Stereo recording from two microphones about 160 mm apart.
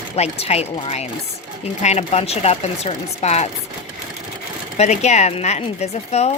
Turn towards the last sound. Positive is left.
turn(degrees=40)  # may be behind; listen again after turning